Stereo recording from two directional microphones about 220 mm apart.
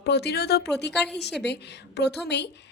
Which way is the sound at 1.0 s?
Centre (ahead or behind).